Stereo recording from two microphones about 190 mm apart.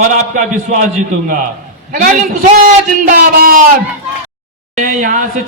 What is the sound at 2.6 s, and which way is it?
A man's voice, 45° right (ahead or behind).